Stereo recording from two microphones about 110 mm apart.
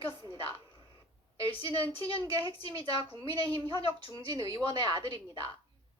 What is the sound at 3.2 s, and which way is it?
Speech, 60° left (ahead or behind).